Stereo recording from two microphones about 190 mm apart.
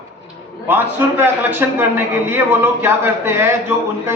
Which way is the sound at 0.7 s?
10° right (ahead or behind).